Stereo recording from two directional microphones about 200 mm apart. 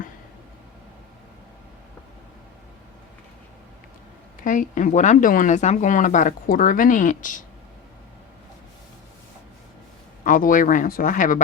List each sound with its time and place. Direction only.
4.4 s speech: 40° left (ahead or behind)
10.2 s speech: 40° left (ahead or behind)